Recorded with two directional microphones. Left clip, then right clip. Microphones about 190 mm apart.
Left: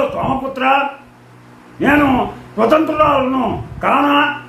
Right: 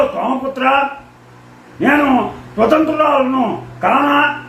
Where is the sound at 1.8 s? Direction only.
15° left (ahead or behind).